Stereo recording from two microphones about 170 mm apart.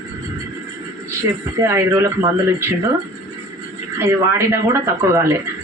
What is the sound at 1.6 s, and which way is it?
Speech, 15° right (ahead or behind).